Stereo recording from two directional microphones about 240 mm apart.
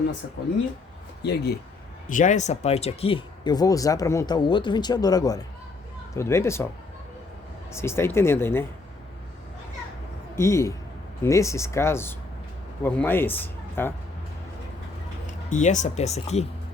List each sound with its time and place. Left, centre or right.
1.2 s speech: left
2.0 s speech: left; by 6.7 s centre
7.8 s speech: centre
10.3 s a man's voice: centre
15.4 s speech: left